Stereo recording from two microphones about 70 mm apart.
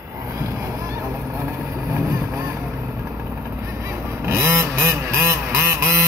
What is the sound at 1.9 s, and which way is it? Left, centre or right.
Vehicle, right.